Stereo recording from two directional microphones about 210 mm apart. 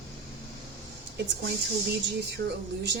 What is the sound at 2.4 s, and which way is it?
Speech, 55° right (ahead or behind).